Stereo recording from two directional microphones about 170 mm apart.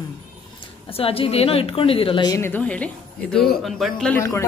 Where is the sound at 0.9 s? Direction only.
35° left (ahead or behind); by 4.1 s centre (ahead or behind).